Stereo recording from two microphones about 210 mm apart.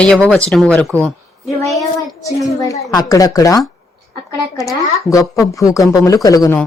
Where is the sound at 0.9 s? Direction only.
5° right (ahead or behind).